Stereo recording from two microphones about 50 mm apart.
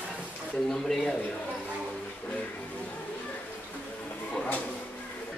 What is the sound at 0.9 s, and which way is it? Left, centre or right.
Speech, centre.